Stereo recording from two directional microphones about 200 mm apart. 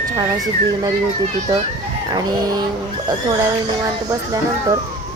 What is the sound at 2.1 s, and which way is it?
Speech, 20° right (ahead or behind).